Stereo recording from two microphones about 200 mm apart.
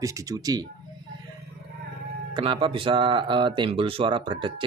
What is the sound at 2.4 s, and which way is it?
Speech, 25° right (ahead or behind).